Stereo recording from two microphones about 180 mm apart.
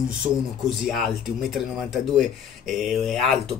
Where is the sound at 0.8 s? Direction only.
Centre (ahead or behind).